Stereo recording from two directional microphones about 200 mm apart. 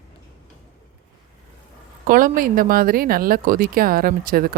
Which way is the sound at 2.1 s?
45° right (ahead or behind).